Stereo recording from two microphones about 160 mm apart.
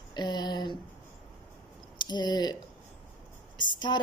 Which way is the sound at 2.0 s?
25° left (ahead or behind).